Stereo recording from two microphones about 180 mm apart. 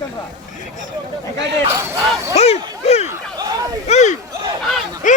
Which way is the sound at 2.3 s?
35° left (ahead or behind).